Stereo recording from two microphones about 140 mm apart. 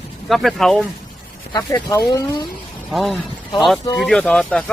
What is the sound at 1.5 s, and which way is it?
Speech, 25° left (ahead or behind).